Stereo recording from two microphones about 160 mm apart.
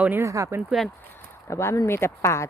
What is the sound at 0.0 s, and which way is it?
Speech, 15° right (ahead or behind).